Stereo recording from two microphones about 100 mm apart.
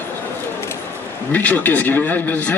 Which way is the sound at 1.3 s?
15° left (ahead or behind).